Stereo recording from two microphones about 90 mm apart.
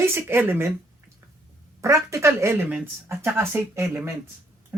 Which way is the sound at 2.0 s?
30° right (ahead or behind).